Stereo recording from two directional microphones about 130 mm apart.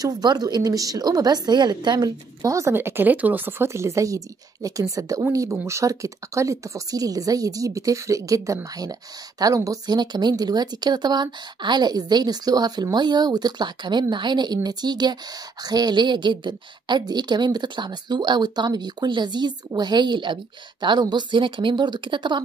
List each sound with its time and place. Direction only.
0.0 s a woman's voice: 30° right (ahead or behind)